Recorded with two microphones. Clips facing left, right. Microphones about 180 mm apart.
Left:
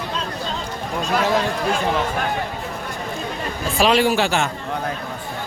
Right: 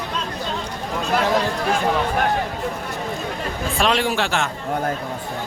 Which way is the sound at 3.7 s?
5° left (ahead or behind).